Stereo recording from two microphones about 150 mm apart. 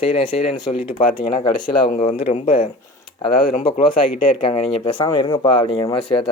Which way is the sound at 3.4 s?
70° left (ahead or behind).